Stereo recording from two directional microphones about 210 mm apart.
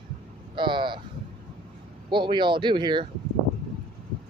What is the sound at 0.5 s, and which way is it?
Vehicle, 20° right (ahead or behind).